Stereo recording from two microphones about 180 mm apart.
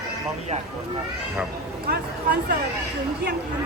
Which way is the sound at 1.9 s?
60° right (ahead or behind).